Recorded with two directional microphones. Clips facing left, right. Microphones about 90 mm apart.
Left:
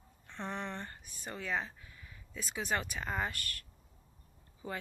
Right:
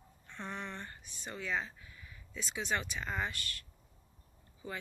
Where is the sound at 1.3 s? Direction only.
45° left (ahead or behind).